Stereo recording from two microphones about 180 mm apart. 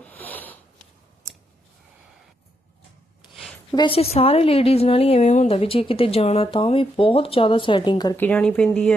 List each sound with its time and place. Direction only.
0.0 s sniff: 10° left (ahead or behind)
3.7 s a woman's voice: 25° left (ahead or behind)
8.1 s speech: 10° left (ahead or behind)